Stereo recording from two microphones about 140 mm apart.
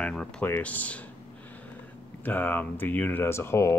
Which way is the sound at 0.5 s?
10° left (ahead or behind).